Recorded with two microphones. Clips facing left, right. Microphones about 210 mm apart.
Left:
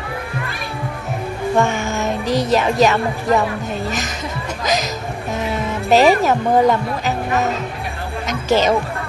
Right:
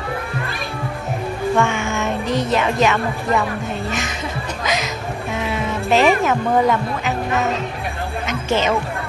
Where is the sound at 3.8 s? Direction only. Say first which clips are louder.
Even; 40° left (ahead or behind).